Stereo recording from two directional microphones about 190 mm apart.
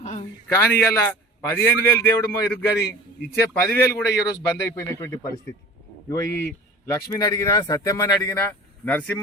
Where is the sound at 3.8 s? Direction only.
60° left (ahead or behind).